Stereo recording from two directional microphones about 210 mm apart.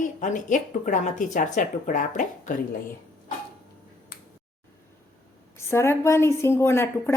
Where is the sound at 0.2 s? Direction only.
35° left (ahead or behind).